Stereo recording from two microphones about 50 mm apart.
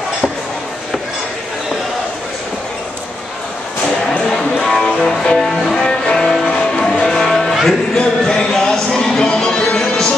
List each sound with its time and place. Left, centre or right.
4.3 s music: centre